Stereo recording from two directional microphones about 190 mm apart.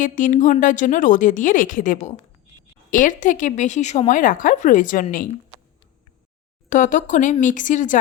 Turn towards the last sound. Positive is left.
turn(degrees=40)  # may be behind; listen again after turning